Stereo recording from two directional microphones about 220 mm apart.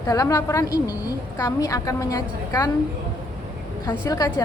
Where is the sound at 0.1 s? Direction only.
15° left (ahead or behind).